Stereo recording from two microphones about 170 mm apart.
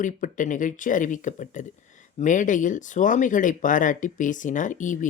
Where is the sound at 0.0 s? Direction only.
50° left (ahead or behind).